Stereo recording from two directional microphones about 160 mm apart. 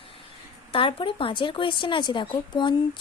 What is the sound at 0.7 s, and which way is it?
Speech, 30° left (ahead or behind).